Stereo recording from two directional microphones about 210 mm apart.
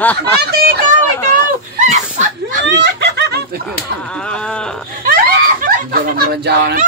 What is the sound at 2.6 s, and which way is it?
Snicker, 55° right (ahead or behind).